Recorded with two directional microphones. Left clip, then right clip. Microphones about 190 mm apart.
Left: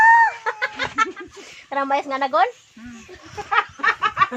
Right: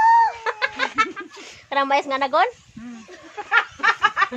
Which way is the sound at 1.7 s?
20° right (ahead or behind).